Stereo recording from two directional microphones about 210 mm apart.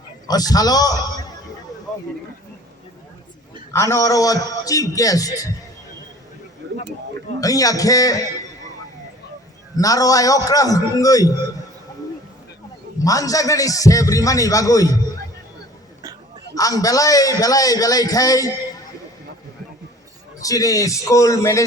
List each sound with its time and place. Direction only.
0.3 s a man's voice: 20° left (ahead or behind)
3.7 s a man's voice: 15° left (ahead or behind)
7.4 s a man's voice: 15° left (ahead or behind)
9.7 s a man's voice: 15° left (ahead or behind)
13.0 s a man's voice: 15° left (ahead or behind)
16.6 s a man's voice: 15° left (ahead or behind)
20.4 s a man's voice: 15° left (ahead or behind)